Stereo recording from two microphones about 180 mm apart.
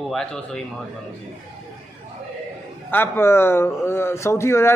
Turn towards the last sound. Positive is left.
turn(degrees=15)  # may be behind; listen again after turning